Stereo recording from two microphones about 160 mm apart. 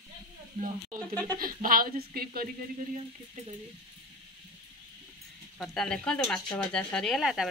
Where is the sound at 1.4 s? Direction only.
65° right (ahead or behind).